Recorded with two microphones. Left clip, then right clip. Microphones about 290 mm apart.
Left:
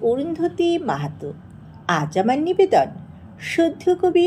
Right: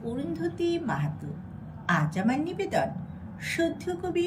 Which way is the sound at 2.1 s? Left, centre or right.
Centre.